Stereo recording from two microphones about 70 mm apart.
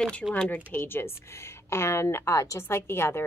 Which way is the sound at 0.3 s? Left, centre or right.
Left.